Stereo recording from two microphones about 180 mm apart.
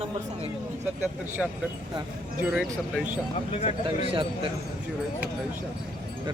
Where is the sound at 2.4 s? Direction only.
5° right (ahead or behind).